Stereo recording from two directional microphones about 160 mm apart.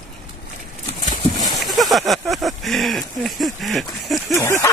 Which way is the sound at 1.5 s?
Centre (ahead or behind).